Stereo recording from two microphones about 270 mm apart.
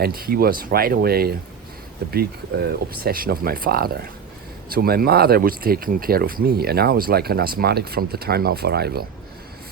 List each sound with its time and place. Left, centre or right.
0.0 s speech: right